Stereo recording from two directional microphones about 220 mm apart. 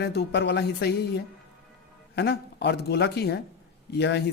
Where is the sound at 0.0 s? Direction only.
45° left (ahead or behind).